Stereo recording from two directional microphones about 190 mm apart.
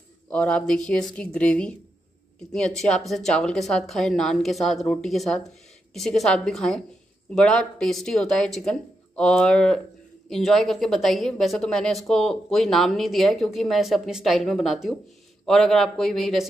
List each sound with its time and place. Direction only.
0.3 s speech: 5° left (ahead or behind)